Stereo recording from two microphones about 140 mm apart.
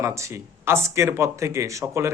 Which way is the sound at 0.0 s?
20° right (ahead or behind).